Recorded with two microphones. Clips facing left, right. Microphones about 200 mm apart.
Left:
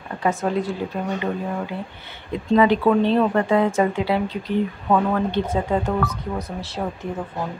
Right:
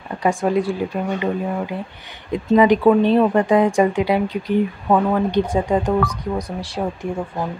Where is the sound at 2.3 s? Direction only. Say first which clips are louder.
Right 3 dB; 15° right (ahead or behind).